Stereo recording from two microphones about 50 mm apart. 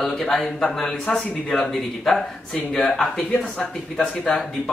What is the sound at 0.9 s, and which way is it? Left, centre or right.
Speech, left.